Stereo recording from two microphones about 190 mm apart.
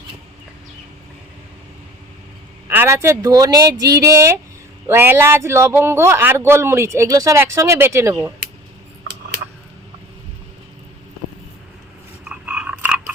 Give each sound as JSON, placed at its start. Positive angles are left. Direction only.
{"t": 2.6, "sound": "speech", "side_deg": -10}
{"t": 12.3, "sound": "frog", "side_deg": -5}